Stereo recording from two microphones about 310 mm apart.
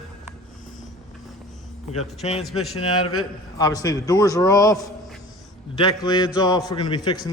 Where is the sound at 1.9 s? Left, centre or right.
Left.